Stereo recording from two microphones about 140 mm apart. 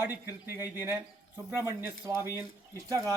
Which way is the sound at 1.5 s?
20° right (ahead or behind).